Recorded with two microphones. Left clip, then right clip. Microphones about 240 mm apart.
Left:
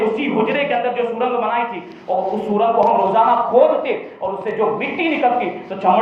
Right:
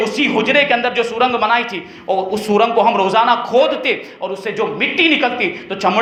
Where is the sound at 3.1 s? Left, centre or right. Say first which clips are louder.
Right 1 dB; right.